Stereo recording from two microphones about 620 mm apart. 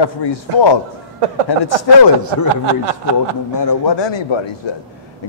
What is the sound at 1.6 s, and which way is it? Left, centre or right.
Speech, left.